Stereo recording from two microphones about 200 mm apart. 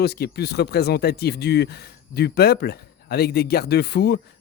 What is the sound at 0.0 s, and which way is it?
Speech, 55° left (ahead or behind).